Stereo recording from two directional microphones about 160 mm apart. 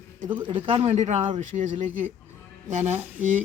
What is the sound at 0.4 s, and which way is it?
Speech, 35° right (ahead or behind).